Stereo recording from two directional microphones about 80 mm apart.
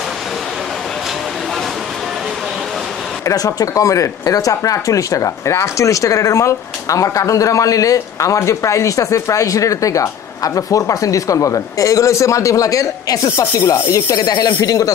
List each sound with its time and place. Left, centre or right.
3.3 s speech: left
14.1 s speech: left